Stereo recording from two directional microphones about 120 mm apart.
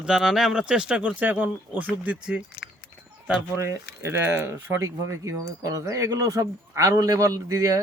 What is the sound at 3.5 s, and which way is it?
Speech, 20° right (ahead or behind).